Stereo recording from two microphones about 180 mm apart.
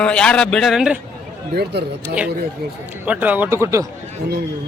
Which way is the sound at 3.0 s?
10° right (ahead or behind).